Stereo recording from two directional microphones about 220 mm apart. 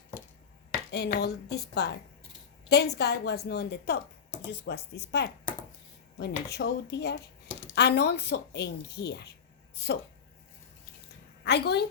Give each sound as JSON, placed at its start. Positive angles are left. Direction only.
{"t": 0.9, "sound": "a woman's voice", "side_deg": 50}
{"t": 11.4, "sound": "a woman's voice", "side_deg": 50}